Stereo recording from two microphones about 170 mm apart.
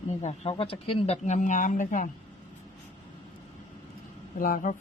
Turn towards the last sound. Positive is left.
turn(degrees=55)  # may be behind; listen again after turning